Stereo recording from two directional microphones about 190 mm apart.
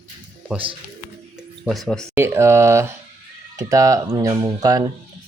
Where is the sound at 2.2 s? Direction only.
15° right (ahead or behind).